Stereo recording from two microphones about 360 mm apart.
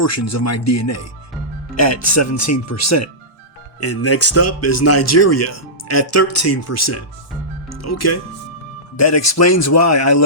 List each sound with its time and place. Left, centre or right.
0.0 s speech: left